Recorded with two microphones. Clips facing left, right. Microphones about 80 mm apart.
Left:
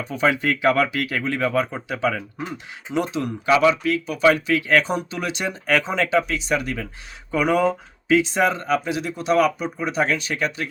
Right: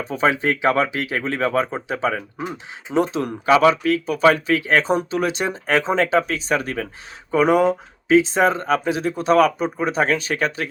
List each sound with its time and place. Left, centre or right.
0.0 s speech: right
7.3 s speech: right